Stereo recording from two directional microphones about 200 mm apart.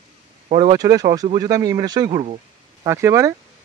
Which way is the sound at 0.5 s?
30° right (ahead or behind).